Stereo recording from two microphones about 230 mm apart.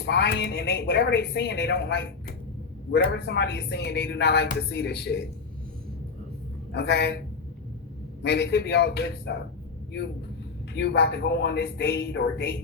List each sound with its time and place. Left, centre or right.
0.0 s a woman's voice: left
6.7 s a woman's voice: left
8.2 s a woman's voice: left
10.8 s a woman's voice: left